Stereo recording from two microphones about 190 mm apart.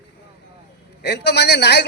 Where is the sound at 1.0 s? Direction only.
60° left (ahead or behind).